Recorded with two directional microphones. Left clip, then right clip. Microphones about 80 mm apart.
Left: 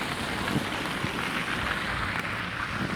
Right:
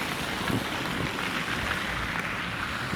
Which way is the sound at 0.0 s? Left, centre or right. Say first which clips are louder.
Even; right.